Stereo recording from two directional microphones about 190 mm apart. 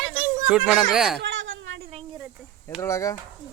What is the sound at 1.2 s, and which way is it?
Cat, 75° right (ahead or behind).